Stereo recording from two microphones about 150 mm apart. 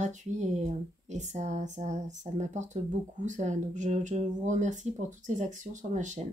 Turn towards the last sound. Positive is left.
turn(degrees=-55)  # may be behind; listen again after turning